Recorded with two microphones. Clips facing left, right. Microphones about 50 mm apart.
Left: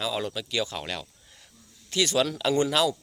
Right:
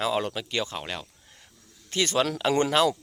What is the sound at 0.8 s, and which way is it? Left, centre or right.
Speech, right.